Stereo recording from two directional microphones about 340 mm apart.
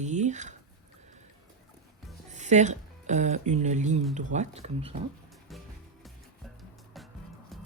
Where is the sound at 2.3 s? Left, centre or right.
Right.